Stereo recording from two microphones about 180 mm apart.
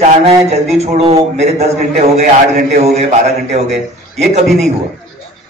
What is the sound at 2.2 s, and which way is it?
Speech, 55° right (ahead or behind).